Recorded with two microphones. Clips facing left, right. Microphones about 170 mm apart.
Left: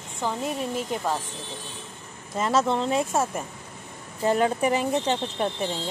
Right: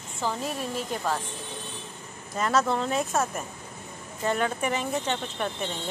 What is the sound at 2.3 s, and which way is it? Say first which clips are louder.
Speech: left 2 dB; 25° left (ahead or behind).